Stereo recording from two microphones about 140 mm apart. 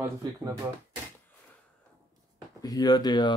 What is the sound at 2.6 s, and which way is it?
Speech, 30° left (ahead or behind).